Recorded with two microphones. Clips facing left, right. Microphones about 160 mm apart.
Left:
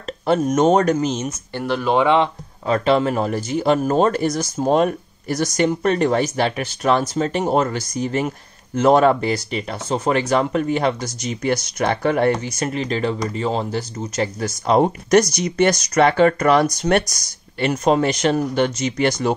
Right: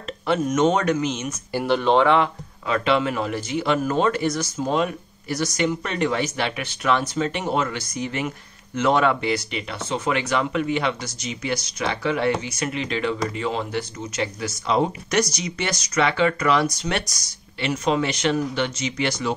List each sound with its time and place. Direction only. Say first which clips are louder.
0.3 s speech: left 4 dB; 40° left (ahead or behind)
1.5 s speech: right 1 dB; 5° right (ahead or behind)
2.0 s speech: left 4 dB; 20° left (ahead or behind)
2.6 s speech: left 4 dB; 40° left (ahead or behind)